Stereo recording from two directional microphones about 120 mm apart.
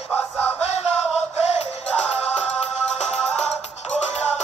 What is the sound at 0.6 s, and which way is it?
Music, 60° left (ahead or behind).